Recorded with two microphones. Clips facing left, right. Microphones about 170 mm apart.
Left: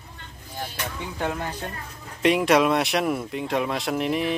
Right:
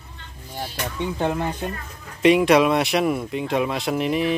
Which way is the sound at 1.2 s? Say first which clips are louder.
Right 4 dB; 25° right (ahead or behind).